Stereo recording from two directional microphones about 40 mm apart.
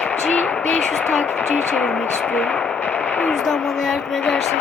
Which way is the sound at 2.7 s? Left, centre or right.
Left.